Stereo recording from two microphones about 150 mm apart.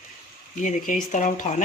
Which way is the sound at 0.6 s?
60° left (ahead or behind).